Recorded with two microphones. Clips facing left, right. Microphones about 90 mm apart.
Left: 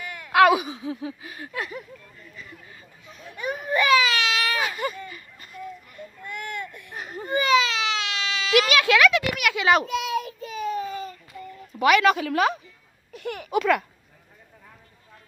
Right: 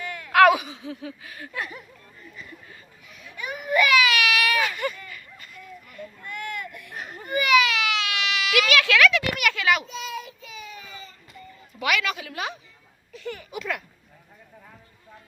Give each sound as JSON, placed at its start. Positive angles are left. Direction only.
{"t": 0.0, "sound": "a sound", "side_deg": 20}
{"t": 0.5, "sound": "speech", "side_deg": 20}
{"t": 3.1, "sound": "baby cry", "side_deg": 35}
{"t": 9.3, "sound": "a child's voice", "side_deg": 0}
{"t": 9.8, "sound": "child singing", "side_deg": 65}
{"t": 11.8, "sound": "a woman's voice", "side_deg": 40}
{"t": 13.1, "sound": "a child's voice", "side_deg": 60}